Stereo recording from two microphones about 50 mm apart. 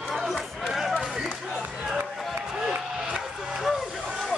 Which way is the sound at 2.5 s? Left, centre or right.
Centre.